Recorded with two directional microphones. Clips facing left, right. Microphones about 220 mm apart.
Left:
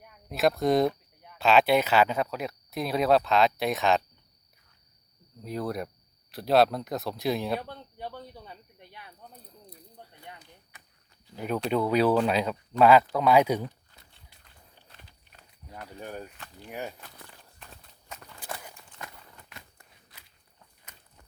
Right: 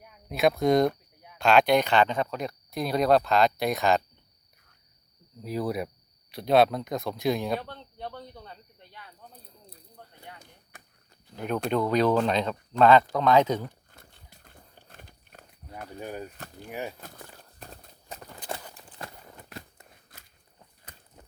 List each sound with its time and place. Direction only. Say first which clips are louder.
0.0 s speech: right 1 dB; centre (ahead or behind)
5.4 s speech: right 2 dB; 5° right (ahead or behind); by 9.0 s 15° left (ahead or behind)
10.3 s a sound: right 1 dB; 45° right (ahead or behind)
11.3 s speech: even; 5° left (ahead or behind)
13.9 s horse: right 5 dB; 45° right (ahead or behind)
16.0 s speech: right 2 dB; 10° right (ahead or behind)
17.0 s speech: right 5 dB; 45° right (ahead or behind)
17.6 s horse: right 8 dB; 40° right (ahead or behind)
18.7 s a sound: right 3 dB; 35° right (ahead or behind)
20.1 s biting: right 3 dB; 50° right (ahead or behind)